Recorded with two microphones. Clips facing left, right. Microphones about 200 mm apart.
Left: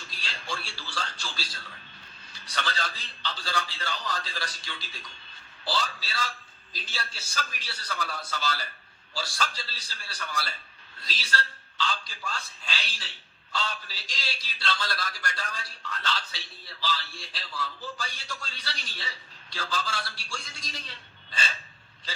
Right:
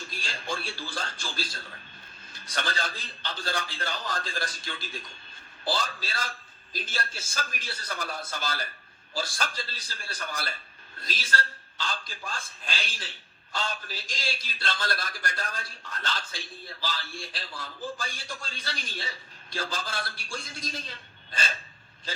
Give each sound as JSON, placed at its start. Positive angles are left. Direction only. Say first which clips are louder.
{"t": 0.1, "sound": "a man's voice", "louder": "right 2 dB", "side_deg": -50}